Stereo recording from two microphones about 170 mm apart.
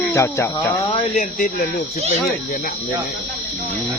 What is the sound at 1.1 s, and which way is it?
Speech, 50° left (ahead or behind).